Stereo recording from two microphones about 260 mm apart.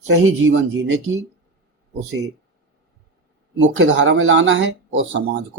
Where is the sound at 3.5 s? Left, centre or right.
Right.